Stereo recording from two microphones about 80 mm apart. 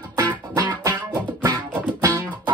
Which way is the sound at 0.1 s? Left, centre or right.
Right.